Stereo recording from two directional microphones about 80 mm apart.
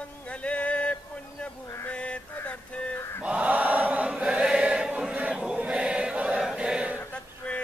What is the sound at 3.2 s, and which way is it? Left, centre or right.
Chant, centre.